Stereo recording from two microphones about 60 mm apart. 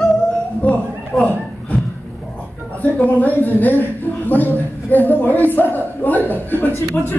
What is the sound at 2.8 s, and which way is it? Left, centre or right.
A woman's voice, left.